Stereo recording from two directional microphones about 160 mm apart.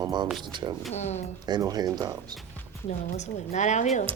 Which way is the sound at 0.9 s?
45° left (ahead or behind).